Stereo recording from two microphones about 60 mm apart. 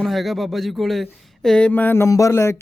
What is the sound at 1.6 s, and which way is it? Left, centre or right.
Speech, left.